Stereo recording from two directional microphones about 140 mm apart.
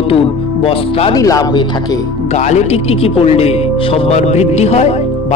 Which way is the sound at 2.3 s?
55° left (ahead or behind).